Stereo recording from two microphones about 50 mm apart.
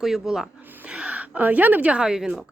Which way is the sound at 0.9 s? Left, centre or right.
Right.